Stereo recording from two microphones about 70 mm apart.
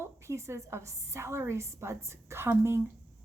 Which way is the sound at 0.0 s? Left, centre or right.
Right.